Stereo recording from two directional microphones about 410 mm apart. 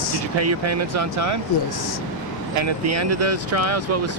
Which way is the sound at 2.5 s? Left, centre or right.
Right.